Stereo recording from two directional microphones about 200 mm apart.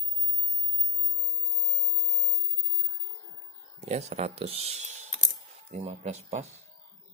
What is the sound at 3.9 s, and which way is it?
Speech, 35° right (ahead or behind).